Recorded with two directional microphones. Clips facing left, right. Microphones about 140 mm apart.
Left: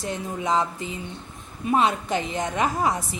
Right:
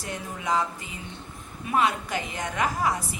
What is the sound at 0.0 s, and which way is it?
A woman's voice, 25° left (ahead or behind).